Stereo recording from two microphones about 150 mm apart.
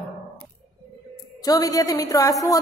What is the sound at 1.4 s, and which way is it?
A woman's voice, 25° left (ahead or behind).